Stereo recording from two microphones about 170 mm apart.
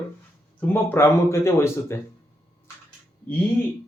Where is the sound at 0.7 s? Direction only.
15° left (ahead or behind).